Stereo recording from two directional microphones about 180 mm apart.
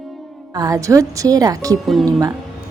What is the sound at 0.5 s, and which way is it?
Speech, 20° right (ahead or behind).